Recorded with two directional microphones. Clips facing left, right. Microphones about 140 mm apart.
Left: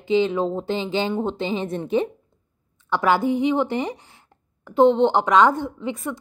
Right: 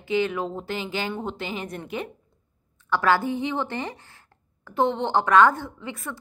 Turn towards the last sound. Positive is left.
turn(degrees=15)  # may be behind; listen again after turning